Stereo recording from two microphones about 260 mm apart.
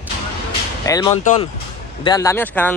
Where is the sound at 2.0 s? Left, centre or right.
Centre.